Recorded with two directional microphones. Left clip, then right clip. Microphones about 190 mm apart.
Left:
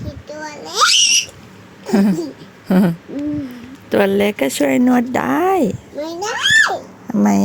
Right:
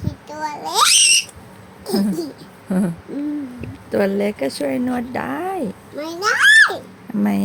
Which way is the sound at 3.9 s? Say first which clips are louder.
Left 4 dB; 40° left (ahead or behind).